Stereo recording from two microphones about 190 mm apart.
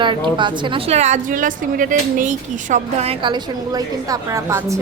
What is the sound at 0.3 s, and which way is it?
Speech, 25° right (ahead or behind).